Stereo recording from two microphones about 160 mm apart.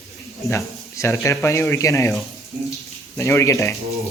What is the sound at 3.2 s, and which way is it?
Speech, 20° left (ahead or behind).